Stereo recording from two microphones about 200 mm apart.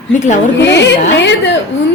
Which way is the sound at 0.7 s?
60° left (ahead or behind).